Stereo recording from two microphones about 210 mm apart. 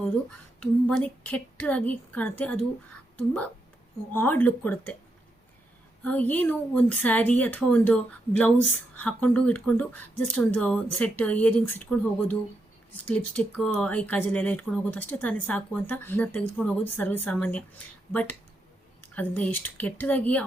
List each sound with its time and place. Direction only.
0.6 s speech: 5° left (ahead or behind)
4.1 s speech: 10° left (ahead or behind)
6.0 s speech: 5° left (ahead or behind)